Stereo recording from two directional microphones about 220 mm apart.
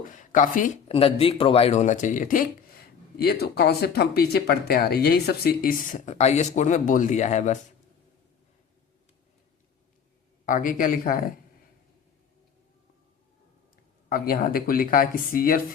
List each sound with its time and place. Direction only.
0.0 s speech: 35° left (ahead or behind)
10.4 s speech: 35° left (ahead or behind)
14.1 s speech: 40° left (ahead or behind)